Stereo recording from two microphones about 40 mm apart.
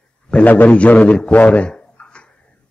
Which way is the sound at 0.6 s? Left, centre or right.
Left.